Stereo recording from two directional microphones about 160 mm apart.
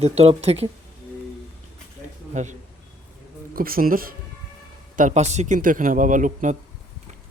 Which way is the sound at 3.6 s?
65° right (ahead or behind).